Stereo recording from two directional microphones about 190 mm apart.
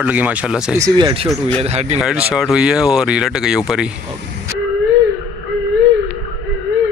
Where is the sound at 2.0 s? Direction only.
5° right (ahead or behind).